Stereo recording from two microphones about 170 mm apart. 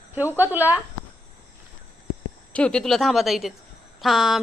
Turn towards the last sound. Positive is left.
turn(degrees=0)  # may be behind; listen again after turning